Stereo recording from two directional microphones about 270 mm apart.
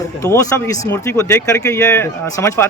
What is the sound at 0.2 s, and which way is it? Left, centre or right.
Speech, centre.